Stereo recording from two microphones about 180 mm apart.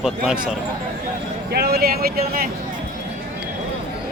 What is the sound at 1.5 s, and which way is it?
Speech, 60° right (ahead or behind).